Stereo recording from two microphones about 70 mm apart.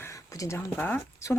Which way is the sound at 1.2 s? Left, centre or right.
Left.